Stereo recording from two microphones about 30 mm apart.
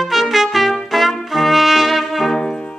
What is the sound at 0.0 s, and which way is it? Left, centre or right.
Trumpet, centre.